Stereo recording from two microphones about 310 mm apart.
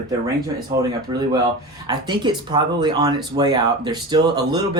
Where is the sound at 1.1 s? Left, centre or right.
Centre.